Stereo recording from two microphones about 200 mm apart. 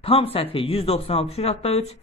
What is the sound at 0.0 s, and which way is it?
A man's voice, 30° left (ahead or behind).